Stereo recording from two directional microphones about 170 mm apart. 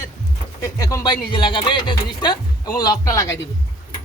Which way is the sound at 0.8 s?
20° left (ahead or behind).